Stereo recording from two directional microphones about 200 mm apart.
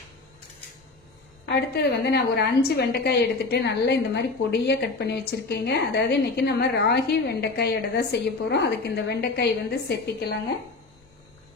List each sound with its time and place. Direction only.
1.4 s a woman's voice: 55° left (ahead or behind)